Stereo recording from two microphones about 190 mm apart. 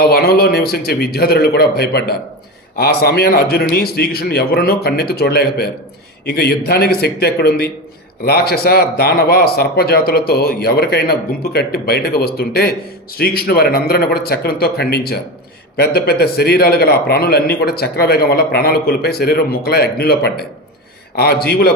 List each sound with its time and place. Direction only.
0.0 s a man's voice: 55° left (ahead or behind)